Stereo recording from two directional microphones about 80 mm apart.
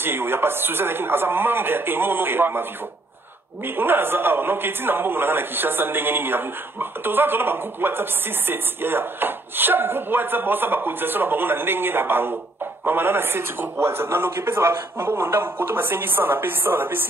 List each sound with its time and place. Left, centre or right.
0.0 s a man's voice: right
3.6 s a man's voice: right